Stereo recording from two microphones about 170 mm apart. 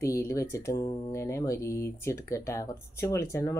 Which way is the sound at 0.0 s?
20° left (ahead or behind).